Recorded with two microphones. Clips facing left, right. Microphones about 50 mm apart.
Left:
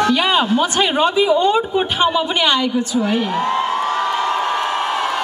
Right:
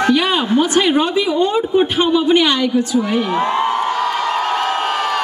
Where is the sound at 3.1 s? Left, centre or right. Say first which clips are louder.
Right 1 dB; right.